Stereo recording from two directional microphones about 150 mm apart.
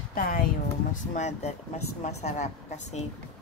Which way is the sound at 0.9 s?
50° left (ahead or behind).